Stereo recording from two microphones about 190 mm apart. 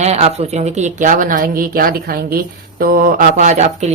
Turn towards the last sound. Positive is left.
turn(degrees=-35)  # may be behind; listen again after turning